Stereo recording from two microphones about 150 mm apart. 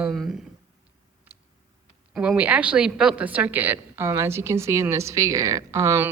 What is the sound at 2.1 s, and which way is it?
A woman's voice, 5° right (ahead or behind).